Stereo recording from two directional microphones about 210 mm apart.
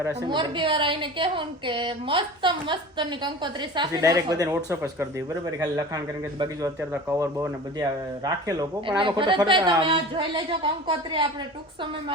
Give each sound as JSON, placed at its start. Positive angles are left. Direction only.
{"t": 0.3, "sound": "a woman's voice", "side_deg": -20}
{"t": 7.2, "sound": "a woman's voice", "side_deg": -15}